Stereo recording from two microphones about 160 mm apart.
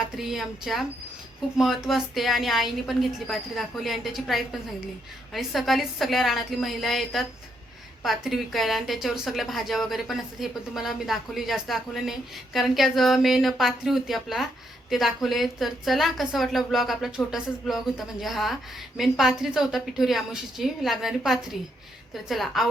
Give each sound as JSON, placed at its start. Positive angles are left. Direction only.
{"t": 0.2, "sound": "a woman's voice", "side_deg": 0}